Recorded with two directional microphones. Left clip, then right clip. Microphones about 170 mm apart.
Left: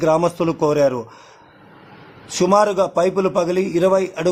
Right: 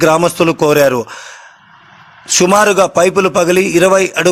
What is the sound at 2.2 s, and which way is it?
A man's voice, 15° right (ahead or behind).